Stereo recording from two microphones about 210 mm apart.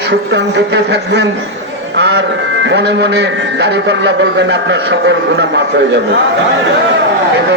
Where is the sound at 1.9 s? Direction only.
50° right (ahead or behind).